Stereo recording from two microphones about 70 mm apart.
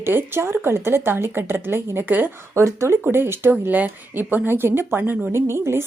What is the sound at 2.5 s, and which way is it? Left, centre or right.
A woman's voice, right.